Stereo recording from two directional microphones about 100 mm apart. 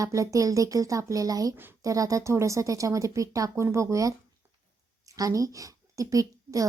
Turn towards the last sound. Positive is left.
turn(degrees=-35)  # may be behind; listen again after turning